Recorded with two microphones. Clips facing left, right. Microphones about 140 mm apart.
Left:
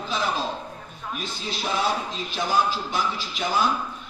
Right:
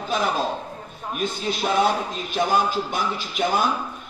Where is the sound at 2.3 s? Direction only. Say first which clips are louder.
Right 3 dB; 50° right (ahead or behind).